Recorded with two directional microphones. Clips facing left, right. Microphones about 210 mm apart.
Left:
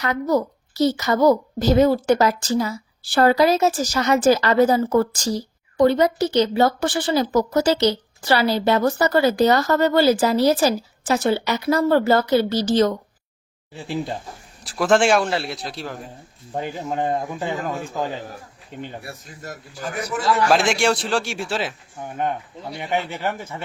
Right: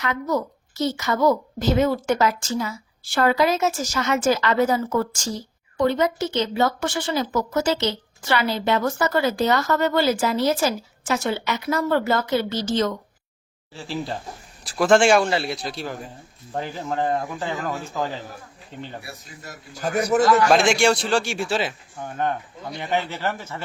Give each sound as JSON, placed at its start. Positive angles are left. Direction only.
{"t": 0.0, "sound": "a woman's voice", "side_deg": 35}
{"t": 13.7, "sound": "speech", "side_deg": 20}
{"t": 14.6, "sound": "a man's voice", "side_deg": 0}
{"t": 16.5, "sound": "speech", "side_deg": 20}
{"t": 19.0, "sound": "a man's voice", "side_deg": 45}
{"t": 20.5, "sound": "a man's voice", "side_deg": 0}
{"t": 21.9, "sound": "speech", "side_deg": 10}